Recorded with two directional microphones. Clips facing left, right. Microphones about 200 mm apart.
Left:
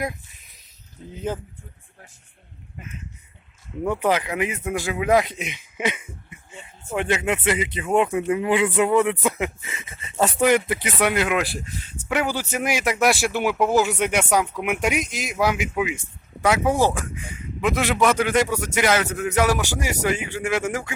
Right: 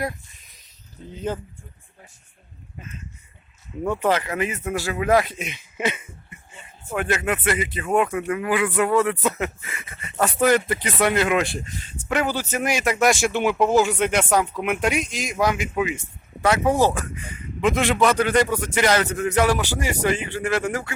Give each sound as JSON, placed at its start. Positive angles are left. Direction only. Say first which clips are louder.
{"t": 1.1, "sound": "speech", "louder": "even", "side_deg": 10}
{"t": 3.8, "sound": "speech", "louder": "even", "side_deg": 15}
{"t": 10.4, "sound": "speech", "louder": "right 1 dB", "side_deg": 10}